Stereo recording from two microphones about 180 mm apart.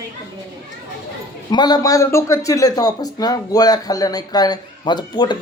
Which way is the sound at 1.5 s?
25° left (ahead or behind).